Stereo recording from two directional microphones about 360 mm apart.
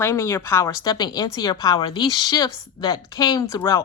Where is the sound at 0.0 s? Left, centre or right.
Centre.